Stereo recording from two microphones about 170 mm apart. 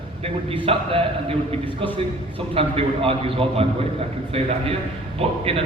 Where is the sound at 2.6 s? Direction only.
35° right (ahead or behind).